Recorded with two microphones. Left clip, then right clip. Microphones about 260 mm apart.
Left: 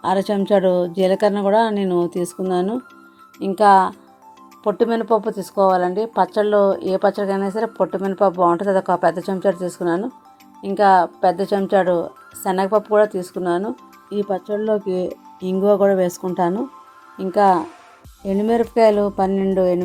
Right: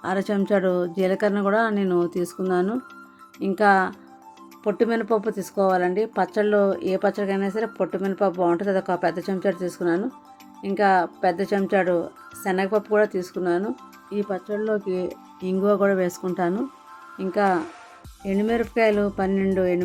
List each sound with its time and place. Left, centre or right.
0.0 s speech: centre
8.9 s speech: left
9.1 s speech: centre